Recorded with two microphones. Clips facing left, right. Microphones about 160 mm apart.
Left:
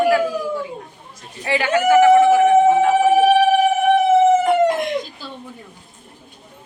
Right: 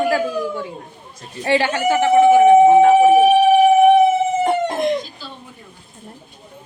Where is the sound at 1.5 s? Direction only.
30° right (ahead or behind).